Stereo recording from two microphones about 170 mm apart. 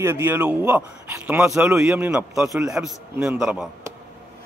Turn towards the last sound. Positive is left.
turn(degrees=-5)  # may be behind; listen again after turning